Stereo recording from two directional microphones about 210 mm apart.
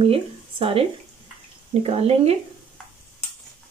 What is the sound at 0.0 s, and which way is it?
Speech, 25° right (ahead or behind).